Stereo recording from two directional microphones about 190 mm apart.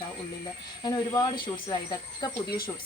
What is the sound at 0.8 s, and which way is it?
Speech, 20° left (ahead or behind).